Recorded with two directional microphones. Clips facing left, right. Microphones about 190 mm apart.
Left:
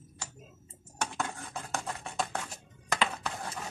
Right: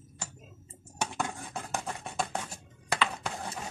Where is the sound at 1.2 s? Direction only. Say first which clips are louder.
Right 2 dB; 15° right (ahead or behind).